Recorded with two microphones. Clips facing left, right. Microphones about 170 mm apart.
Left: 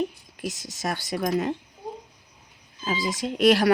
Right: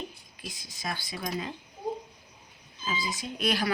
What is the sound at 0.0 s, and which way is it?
Speech, 80° left.